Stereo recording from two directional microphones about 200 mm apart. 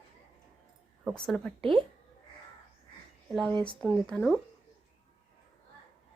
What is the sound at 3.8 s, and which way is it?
Speech, 5° left (ahead or behind).